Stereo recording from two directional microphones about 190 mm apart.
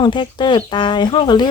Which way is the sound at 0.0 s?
25° left (ahead or behind).